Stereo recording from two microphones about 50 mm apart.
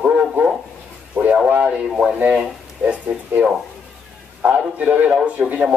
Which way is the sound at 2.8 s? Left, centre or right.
Right.